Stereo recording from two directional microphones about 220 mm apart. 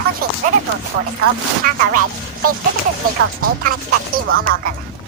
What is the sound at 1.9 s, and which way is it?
Speech, 90° right.